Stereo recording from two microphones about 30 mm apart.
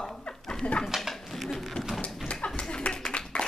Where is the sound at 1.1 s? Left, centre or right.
Centre.